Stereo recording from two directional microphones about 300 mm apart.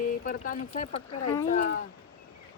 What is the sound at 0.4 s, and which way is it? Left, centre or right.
Speech, left.